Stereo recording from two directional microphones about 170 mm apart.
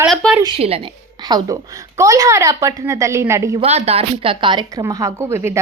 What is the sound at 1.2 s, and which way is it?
Speech, 25° right (ahead or behind).